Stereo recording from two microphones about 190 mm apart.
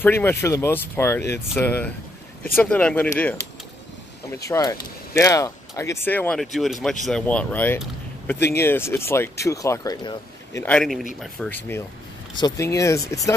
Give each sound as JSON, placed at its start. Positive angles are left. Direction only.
{"t": 0.0, "sound": "speech", "side_deg": 10}
{"t": 4.5, "sound": "speech", "side_deg": 15}
{"t": 10.7, "sound": "speech", "side_deg": 0}
{"t": 12.4, "sound": "speech", "side_deg": 20}